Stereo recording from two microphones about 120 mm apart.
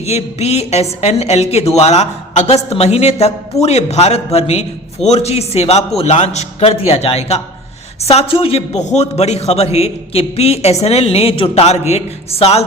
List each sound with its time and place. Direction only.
0.0 s speech: 60° left (ahead or behind)